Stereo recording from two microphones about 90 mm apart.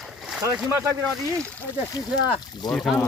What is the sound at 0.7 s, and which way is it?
Speech, 35° right (ahead or behind).